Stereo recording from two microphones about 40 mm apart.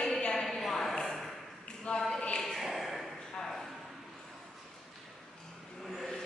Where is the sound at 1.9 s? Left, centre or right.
Centre.